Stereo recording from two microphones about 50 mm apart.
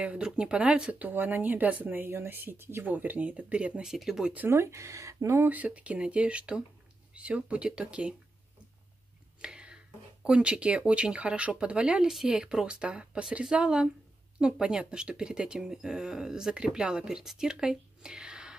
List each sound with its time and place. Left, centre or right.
0.0 s speech: centre
0.9 s speech: right
2.8 s speech: right
3.8 s speech: centre
4.5 s speech: right
5.5 s speech: right
9.4 s whispering: centre
10.2 s speech: centre